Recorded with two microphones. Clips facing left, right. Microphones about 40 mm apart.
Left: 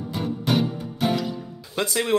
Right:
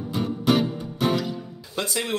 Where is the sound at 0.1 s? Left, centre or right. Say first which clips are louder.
Right 2 dB; centre.